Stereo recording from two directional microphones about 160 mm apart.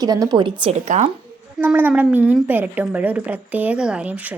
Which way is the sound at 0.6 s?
45° right (ahead or behind).